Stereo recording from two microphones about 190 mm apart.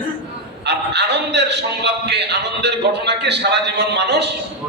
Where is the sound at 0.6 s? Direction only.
60° right (ahead or behind).